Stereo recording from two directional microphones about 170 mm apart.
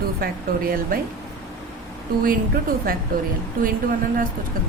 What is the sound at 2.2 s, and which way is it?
A woman's voice, 60° right (ahead or behind).